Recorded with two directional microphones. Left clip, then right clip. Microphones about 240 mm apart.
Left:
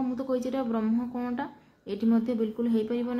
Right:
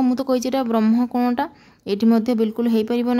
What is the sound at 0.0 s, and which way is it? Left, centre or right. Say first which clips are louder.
A woman's voice: right 9 dB; right.